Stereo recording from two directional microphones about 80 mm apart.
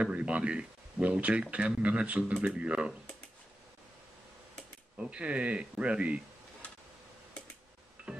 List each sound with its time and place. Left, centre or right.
0.0 s speech: centre
4.9 s speech: centre
8.0 s music: centre